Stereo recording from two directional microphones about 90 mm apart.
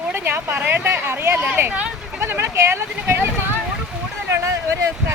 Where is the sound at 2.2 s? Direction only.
30° right (ahead or behind).